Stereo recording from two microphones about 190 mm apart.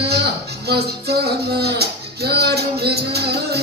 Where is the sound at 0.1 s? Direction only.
60° right (ahead or behind).